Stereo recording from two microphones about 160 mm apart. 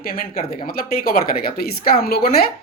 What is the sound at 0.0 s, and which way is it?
A woman's voice, 65° left (ahead or behind).